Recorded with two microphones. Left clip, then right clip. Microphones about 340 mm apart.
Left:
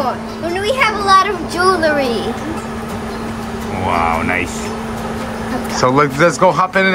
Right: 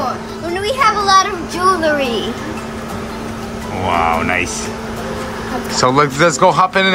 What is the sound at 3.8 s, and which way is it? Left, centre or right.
Speech, centre.